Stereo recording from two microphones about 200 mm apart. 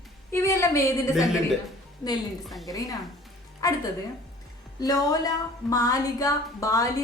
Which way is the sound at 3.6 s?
15° left (ahead or behind).